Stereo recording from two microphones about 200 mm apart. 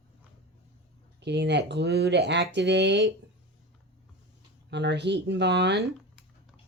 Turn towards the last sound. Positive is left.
turn(degrees=-60)  # may be behind; listen again after turning